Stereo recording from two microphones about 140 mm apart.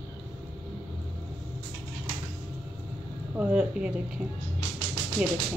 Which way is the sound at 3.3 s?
10° right (ahead or behind).